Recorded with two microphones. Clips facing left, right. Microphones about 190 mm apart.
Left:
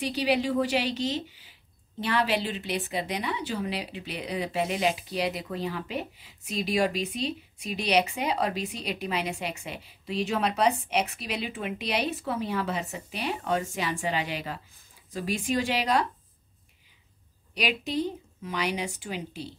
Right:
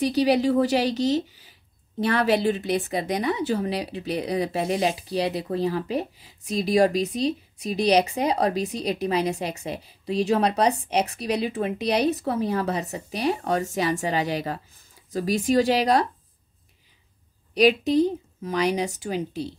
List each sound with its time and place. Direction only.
0.0 s speech: 40° right (ahead or behind)
17.6 s speech: 40° right (ahead or behind)